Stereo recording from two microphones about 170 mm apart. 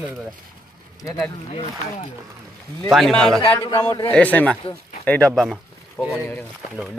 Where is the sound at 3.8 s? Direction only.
30° left (ahead or behind).